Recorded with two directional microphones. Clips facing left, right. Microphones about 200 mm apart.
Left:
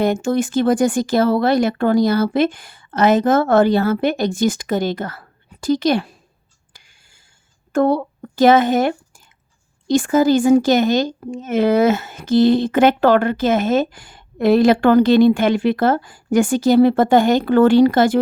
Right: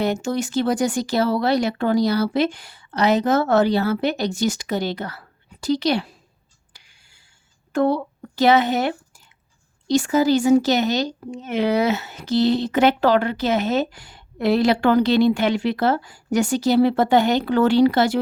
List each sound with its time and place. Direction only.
0.0 s speech: 50° left (ahead or behind)
6.7 s a sound: 45° left (ahead or behind)
7.7 s speech: 45° left (ahead or behind)